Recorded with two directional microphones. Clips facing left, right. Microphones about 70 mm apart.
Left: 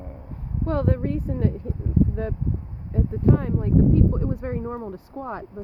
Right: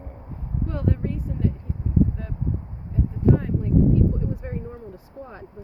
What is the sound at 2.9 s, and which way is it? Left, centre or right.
Speech, left.